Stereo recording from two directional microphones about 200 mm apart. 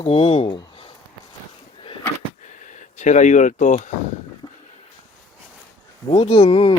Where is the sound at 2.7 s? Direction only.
35° left (ahead or behind).